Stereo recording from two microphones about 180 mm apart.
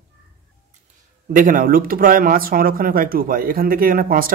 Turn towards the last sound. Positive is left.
turn(degrees=-50)  # may be behind; listen again after turning